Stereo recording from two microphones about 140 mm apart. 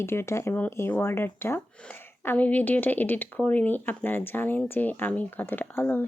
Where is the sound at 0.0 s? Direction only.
20° left (ahead or behind).